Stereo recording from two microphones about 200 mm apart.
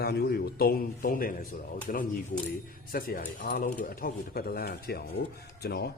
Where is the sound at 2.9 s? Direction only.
45° left (ahead or behind).